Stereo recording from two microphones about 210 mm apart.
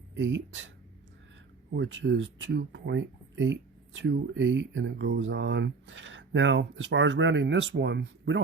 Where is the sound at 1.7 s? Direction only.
60° right (ahead or behind).